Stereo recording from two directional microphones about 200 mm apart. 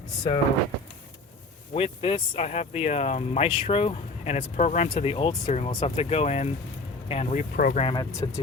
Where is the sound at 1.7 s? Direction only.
25° left (ahead or behind).